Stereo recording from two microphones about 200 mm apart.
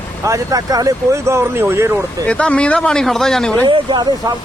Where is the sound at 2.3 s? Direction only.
5° left (ahead or behind).